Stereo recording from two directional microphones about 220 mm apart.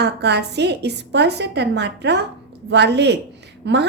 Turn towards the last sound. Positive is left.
turn(degrees=-50)  # may be behind; listen again after turning